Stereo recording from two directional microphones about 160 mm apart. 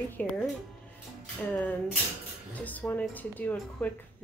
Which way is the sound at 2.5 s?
10° left (ahead or behind).